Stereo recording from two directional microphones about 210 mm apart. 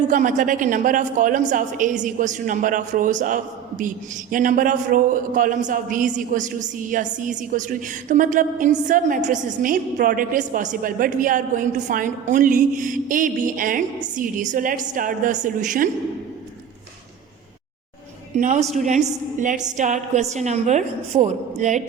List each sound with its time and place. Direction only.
0.1 s a woman's voice: 40° right (ahead or behind)
18.3 s a woman's voice: 35° right (ahead or behind)